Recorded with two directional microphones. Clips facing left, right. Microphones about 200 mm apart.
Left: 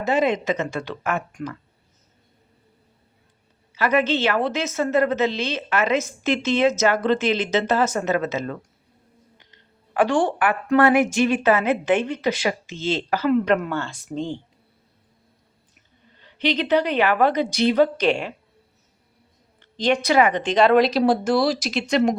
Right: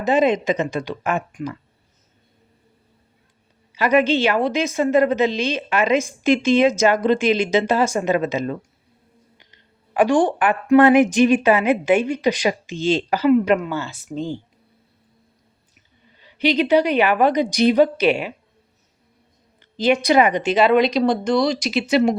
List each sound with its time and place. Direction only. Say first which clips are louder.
0.0 s a woman's voice: right 3 dB; 20° right (ahead or behind)
3.8 s a woman's voice: right 3 dB; 15° right (ahead or behind)
16.2 s a woman's voice: right 4 dB; 10° right (ahead or behind)
19.7 s speech: right 3 dB; 5° right (ahead or behind)